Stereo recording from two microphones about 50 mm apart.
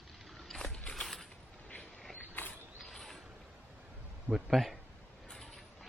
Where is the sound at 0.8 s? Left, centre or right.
Centre.